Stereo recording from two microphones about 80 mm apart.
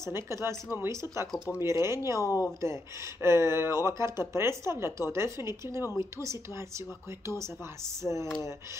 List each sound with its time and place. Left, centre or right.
0.0 s speech: right
1.6 s speech: right
2.2 s a woman's voice: left
2.6 s speech: right
8.0 s speech: right